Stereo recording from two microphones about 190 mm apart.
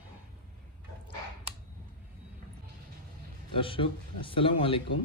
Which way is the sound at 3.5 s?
25° left (ahead or behind).